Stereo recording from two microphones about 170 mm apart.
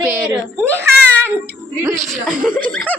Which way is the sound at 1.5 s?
15° right (ahead or behind).